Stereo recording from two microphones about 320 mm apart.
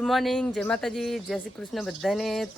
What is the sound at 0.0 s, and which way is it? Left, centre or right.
Speech, centre.